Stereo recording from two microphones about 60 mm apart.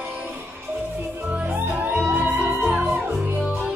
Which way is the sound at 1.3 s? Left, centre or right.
Right.